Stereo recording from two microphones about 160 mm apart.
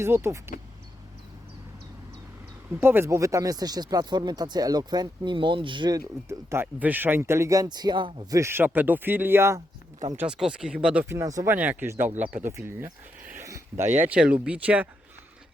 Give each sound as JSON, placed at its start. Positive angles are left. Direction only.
{"t": 0.0, "sound": "speech", "side_deg": -15}
{"t": 2.8, "sound": "speech", "side_deg": -15}
{"t": 6.2, "sound": "speech", "side_deg": -15}
{"t": 8.4, "sound": "speech", "side_deg": -15}